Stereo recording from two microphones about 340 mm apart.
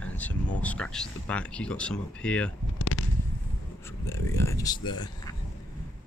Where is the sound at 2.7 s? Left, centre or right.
Left.